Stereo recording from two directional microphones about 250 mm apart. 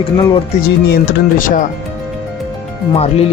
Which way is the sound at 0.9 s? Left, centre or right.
Left.